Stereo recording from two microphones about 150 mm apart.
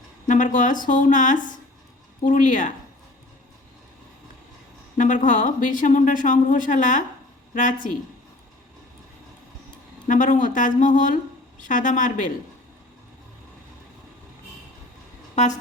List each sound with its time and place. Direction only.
0.3 s speech: 55° left (ahead or behind)
4.9 s speech: 55° left (ahead or behind)
10.1 s speech: 60° left (ahead or behind)